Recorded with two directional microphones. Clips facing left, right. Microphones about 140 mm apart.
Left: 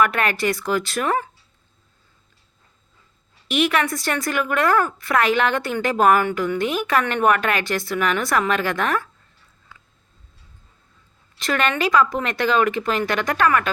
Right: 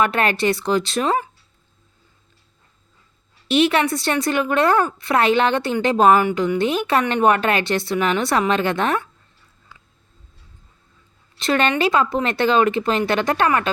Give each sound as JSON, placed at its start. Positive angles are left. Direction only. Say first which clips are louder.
{"t": 0.0, "sound": "speech", "louder": "right 1 dB", "side_deg": -30}
{"t": 3.5, "sound": "speech", "louder": "right 3 dB", "side_deg": -30}
{"t": 11.3, "sound": "speech", "louder": "right 3 dB", "side_deg": -25}